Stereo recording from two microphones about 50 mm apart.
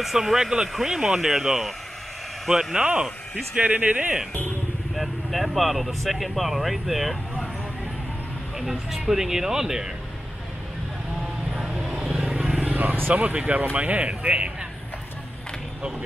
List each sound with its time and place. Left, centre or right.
0.0 s speech: centre
2.7 s speech: centre
4.9 s speech: centre
8.5 s speech: centre
11.5 s vehicle: centre; by 12.7 s right
12.7 s vehicle: right
13.1 s speech: right